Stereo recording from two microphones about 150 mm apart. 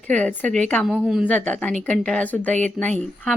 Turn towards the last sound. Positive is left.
turn(degrees=10)  # may be behind; listen again after turning